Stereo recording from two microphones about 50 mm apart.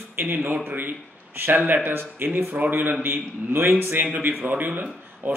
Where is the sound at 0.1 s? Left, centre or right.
Right.